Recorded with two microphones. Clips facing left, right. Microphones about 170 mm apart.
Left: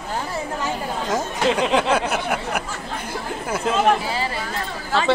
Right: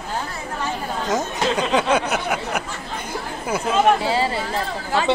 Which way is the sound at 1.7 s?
Centre (ahead or behind).